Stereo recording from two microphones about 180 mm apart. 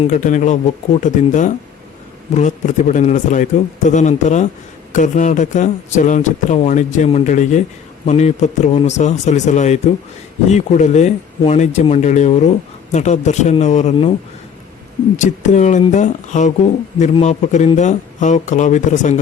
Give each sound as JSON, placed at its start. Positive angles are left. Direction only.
{"t": 0.1, "sound": "speech", "side_deg": 45}
{"t": 15.2, "sound": "speech", "side_deg": 40}